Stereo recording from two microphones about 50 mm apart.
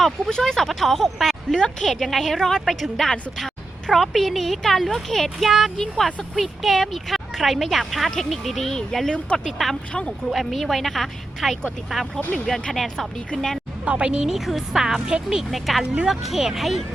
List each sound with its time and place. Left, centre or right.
0.0 s speech: centre
5.5 s speech: centre
5.7 s speech: centre
12.7 s speech: centre
13.8 s speech: right
14.3 s speech: centre
15.4 s speech: centre